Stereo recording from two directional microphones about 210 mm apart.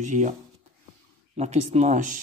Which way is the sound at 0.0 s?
35° right (ahead or behind).